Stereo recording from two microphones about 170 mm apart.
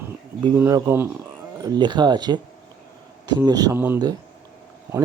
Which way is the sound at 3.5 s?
20° right (ahead or behind).